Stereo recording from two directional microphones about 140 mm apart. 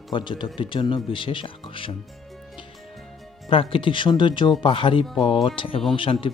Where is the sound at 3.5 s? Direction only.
40° left (ahead or behind).